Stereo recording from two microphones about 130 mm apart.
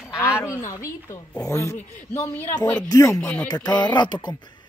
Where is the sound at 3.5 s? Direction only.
35° left (ahead or behind).